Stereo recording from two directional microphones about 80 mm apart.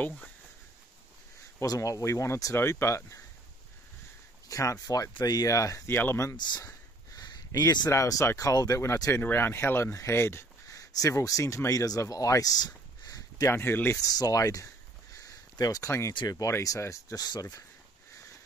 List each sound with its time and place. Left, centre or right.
1.7 s speech: left
4.5 s speech: left
5.9 s speech: left
6.3 s speech: left
7.2 s a sound: left
7.9 s speech: left
9.2 s speech: left
10.8 s speech: left
13.5 s speech: left
14.0 s speech: left
15.1 s a sound: left
16.1 s speech: left